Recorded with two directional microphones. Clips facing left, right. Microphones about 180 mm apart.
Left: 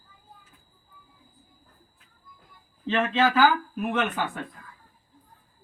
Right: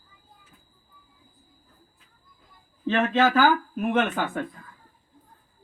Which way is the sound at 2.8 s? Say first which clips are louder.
Right 2 dB; 45° right (ahead or behind).